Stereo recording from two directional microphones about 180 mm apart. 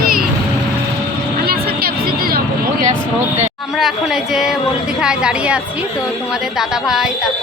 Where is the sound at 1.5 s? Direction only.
55° right (ahead or behind).